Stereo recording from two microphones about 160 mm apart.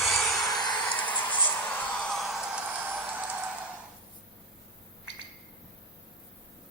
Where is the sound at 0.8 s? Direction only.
10° left (ahead or behind).